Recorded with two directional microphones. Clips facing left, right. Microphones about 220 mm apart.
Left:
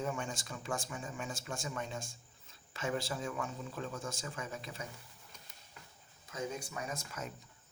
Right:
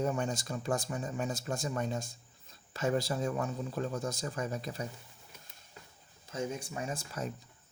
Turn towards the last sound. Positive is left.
turn(degrees=-30)  # may be behind; listen again after turning